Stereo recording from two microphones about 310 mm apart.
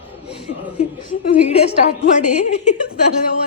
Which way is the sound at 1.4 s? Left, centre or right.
Centre.